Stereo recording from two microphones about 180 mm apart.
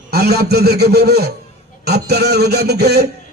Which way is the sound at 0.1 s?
65° right (ahead or behind).